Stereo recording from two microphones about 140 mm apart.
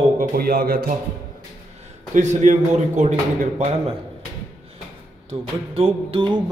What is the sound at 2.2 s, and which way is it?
A man's voice, 60° right (ahead or behind).